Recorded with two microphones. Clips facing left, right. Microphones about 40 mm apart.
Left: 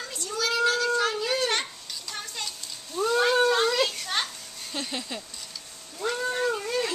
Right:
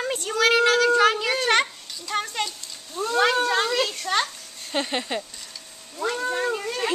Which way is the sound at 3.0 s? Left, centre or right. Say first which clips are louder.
Left 2 dB; centre.